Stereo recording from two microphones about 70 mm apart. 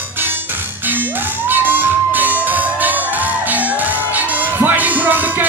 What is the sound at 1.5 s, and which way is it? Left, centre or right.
Music, right.